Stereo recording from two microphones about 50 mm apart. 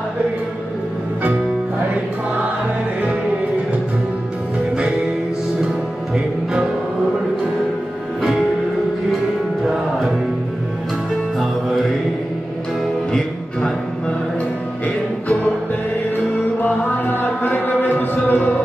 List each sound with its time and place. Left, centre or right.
6.1 s music: centre
13.1 s music: centre
16.5 s chant: left